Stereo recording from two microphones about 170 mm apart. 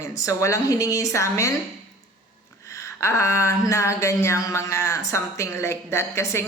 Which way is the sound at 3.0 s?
15° left (ahead or behind).